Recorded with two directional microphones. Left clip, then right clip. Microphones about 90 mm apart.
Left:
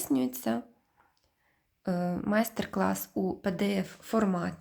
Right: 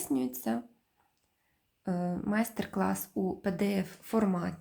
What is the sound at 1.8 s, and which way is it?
Speech, 20° left (ahead or behind).